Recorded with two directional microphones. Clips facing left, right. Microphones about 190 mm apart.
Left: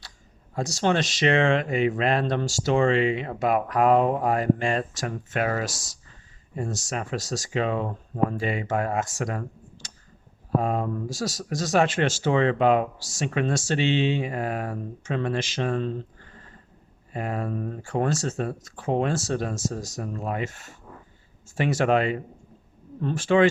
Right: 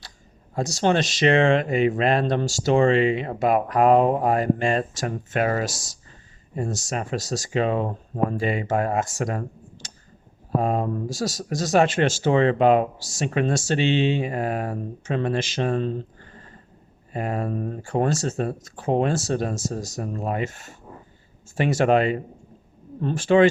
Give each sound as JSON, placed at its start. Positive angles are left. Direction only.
{"t": 0.5, "sound": "speech", "side_deg": -35}
{"t": 14.2, "sound": "speech", "side_deg": -35}